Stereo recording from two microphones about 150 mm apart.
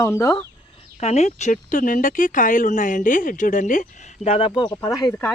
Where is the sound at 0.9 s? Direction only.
45° left (ahead or behind).